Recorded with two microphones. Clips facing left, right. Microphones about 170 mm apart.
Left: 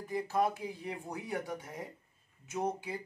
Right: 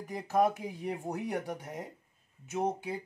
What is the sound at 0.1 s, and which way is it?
Speech, 45° right (ahead or behind).